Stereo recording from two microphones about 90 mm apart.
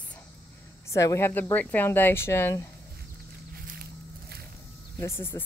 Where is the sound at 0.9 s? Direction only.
35° left (ahead or behind).